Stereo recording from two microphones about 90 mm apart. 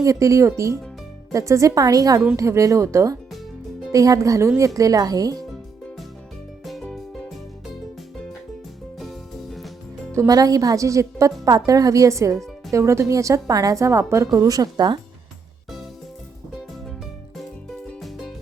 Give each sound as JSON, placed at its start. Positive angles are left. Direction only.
{"t": 0.0, "sound": "a woman's voice", "side_deg": -35}
{"t": 6.7, "sound": "music", "side_deg": 0}
{"t": 9.0, "sound": "music", "side_deg": 0}
{"t": 10.2, "sound": "a woman's voice", "side_deg": -45}
{"t": 18.0, "sound": "music", "side_deg": 0}